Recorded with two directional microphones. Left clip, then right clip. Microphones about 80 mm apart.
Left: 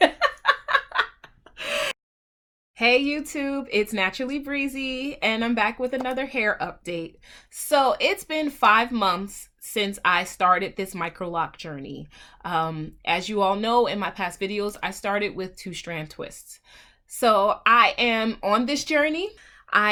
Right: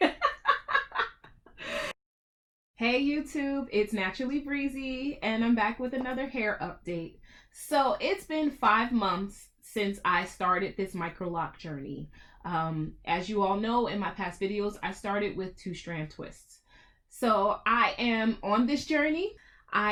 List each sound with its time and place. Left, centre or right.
0.0 s giggle: left
1.5 s gasp: left
2.7 s speech: left
17.2 s speech: left